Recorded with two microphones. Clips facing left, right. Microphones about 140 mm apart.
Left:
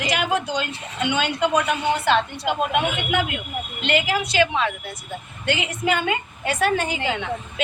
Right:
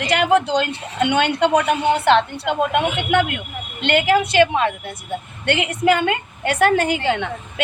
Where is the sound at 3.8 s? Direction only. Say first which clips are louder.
Right 6 dB; 65° right (ahead or behind).